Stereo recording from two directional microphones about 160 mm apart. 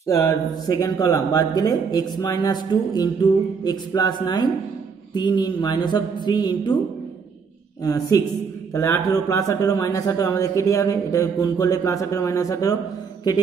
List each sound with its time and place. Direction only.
0.0 s speech: 20° left (ahead or behind)
7.8 s speech: 20° left (ahead or behind)